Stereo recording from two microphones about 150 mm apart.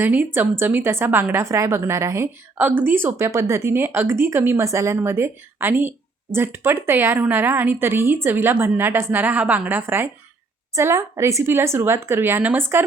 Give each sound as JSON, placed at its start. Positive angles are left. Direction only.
{"t": 0.0, "sound": "a woman's voice", "side_deg": -10}